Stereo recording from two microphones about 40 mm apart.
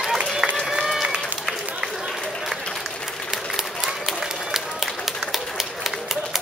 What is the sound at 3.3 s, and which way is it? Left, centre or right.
Run, centre.